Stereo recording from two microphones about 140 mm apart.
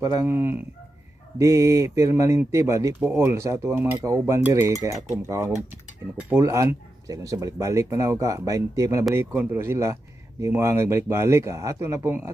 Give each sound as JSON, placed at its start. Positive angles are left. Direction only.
{"t": 0.0, "sound": "speech", "side_deg": -25}